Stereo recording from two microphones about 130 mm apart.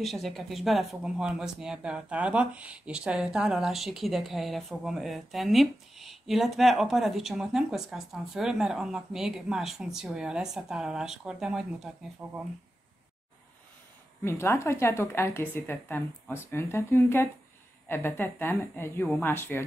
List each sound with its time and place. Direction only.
0.0 s speech: centre (ahead or behind)
14.2 s a woman's voice: 20° left (ahead or behind)